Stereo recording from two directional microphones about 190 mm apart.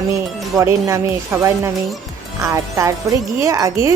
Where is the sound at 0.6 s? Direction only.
15° right (ahead or behind).